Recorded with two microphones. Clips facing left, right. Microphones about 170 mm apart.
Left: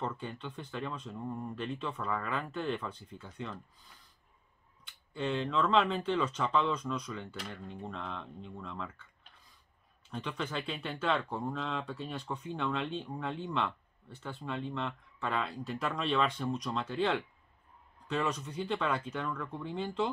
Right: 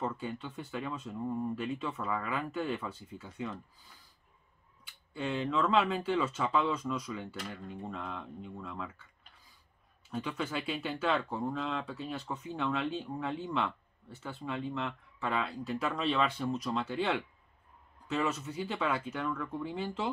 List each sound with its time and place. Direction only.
0.0 s speech: 5° right (ahead or behind)
4.8 s speech: 5° right (ahead or behind)